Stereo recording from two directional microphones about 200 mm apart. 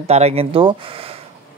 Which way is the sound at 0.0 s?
30° right (ahead or behind).